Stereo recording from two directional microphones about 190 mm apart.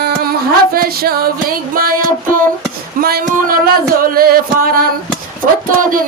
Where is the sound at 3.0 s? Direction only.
50° right (ahead or behind).